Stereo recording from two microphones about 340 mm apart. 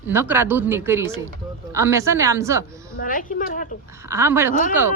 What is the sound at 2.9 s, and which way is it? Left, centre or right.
Speech, left.